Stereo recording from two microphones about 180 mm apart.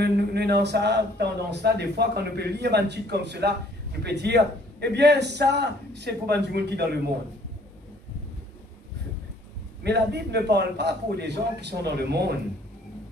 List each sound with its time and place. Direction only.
0.0 s a man's voice: 65° right (ahead or behind)
9.8 s a man's voice: 65° right (ahead or behind)